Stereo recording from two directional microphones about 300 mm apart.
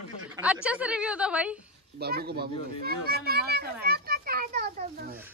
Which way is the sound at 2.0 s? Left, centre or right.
Right.